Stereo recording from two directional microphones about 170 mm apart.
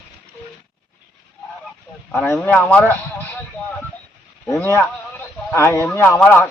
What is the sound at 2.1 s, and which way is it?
A man's voice, 10° left (ahead or behind).